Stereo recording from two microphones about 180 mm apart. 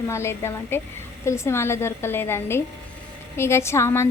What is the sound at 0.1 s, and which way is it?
Speech, 15° left (ahead or behind).